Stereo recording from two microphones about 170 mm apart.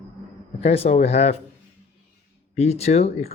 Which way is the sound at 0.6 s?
40° left (ahead or behind).